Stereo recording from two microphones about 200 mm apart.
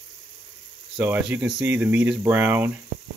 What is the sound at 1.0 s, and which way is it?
Speech, 5° right (ahead or behind).